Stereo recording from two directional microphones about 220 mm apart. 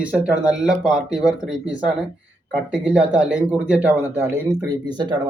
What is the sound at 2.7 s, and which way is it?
Speech, 5° right (ahead or behind).